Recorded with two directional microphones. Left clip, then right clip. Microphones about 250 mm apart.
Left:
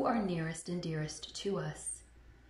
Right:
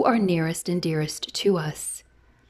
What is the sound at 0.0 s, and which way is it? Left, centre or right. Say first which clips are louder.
A woman's voice: right 12 dB; right.